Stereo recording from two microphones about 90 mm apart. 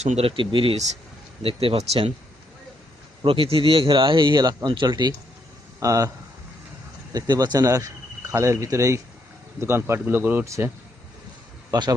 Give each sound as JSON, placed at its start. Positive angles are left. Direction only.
{"t": 0.2, "sound": "speech", "side_deg": -80}
{"t": 1.4, "sound": "speech", "side_deg": -90}
{"t": 3.2, "sound": "speech", "side_deg": -90}
{"t": 5.8, "sound": "a man's voice", "side_deg": -40}
{"t": 10.4, "sound": "speech", "side_deg": -35}
{"t": 11.7, "sound": "a man's voice", "side_deg": -50}